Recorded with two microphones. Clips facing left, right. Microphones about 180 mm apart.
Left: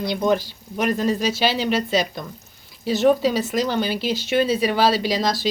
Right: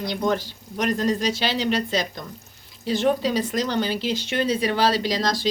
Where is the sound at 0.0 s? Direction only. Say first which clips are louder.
Left 3 dB; 10° left (ahead or behind).